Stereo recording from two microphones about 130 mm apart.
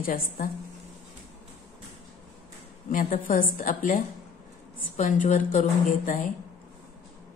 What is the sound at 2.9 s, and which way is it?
A woman's voice, 90° left.